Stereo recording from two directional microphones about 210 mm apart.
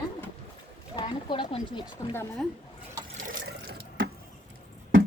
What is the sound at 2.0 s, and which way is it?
Speech, 15° left (ahead or behind).